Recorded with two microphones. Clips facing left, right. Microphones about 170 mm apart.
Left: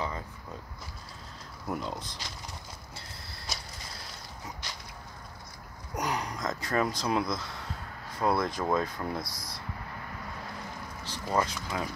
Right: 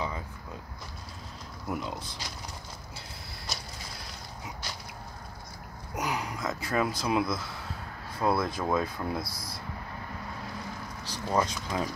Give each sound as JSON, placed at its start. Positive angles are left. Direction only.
{"t": 1.7, "sound": "speech", "side_deg": -5}
{"t": 5.9, "sound": "speech", "side_deg": -5}
{"t": 11.1, "sound": "speech", "side_deg": -15}